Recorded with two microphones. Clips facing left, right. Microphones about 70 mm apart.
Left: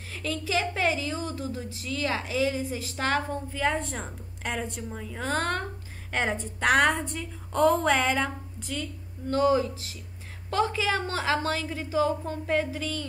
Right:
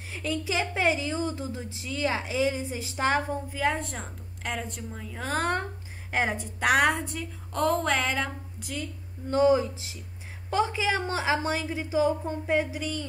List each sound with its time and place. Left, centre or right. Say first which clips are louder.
0.1 s a woman's voice: left 1 dB; centre
9.3 s a woman's voice: right 1 dB; centre